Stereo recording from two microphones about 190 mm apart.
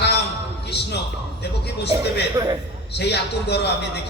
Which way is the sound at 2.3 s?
20° right (ahead or behind).